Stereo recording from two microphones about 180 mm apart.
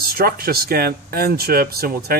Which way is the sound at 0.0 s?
55° right (ahead or behind).